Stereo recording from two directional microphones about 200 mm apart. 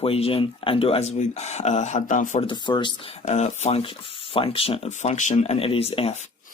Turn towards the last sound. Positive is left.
turn(degrees=30)  # may be behind; listen again after turning